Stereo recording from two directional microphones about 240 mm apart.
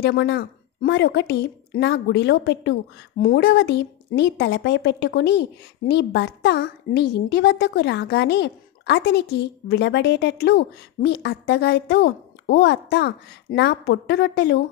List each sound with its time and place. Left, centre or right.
0.0 s a woman's voice: left